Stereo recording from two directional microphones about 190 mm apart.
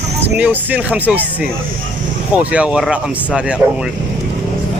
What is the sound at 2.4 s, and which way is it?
Speech, 5° right (ahead or behind).